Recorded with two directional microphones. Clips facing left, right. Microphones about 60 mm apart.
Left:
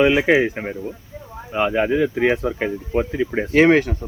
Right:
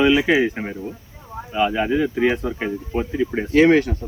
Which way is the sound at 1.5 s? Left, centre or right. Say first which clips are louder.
Left 1 dB; left.